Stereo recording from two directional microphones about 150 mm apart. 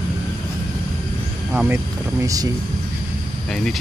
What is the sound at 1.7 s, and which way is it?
Speech, 20° right (ahead or behind).